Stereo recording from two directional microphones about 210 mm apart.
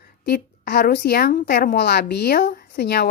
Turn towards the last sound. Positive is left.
turn(degrees=50)  # may be behind; listen again after turning